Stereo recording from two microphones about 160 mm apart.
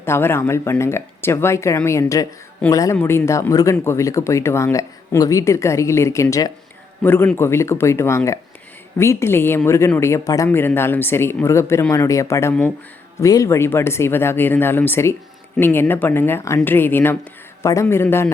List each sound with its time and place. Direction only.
0.0 s speech: 15° left (ahead or behind)